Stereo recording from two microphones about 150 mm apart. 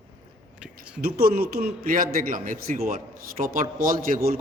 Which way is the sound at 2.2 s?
65° right (ahead or behind).